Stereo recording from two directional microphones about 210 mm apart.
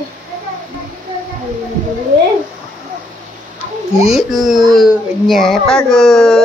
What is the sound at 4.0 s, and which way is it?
Speech, centre (ahead or behind).